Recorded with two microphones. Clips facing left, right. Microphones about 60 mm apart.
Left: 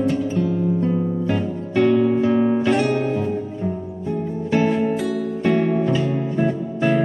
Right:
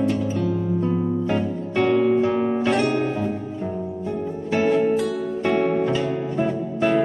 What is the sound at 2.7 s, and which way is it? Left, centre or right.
Guitar, centre.